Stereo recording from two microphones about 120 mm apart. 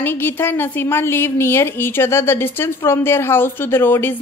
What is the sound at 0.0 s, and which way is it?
A woman's voice, 20° left (ahead or behind).